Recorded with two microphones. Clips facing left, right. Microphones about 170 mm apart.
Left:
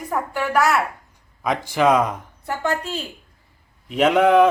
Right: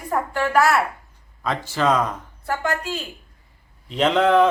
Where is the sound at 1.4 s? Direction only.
15° left (ahead or behind).